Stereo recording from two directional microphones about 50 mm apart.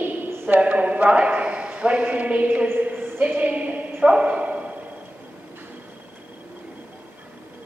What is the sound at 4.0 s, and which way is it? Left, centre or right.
Bow-wow, right.